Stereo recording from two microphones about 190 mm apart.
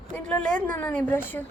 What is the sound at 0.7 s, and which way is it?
Speech, 10° left (ahead or behind).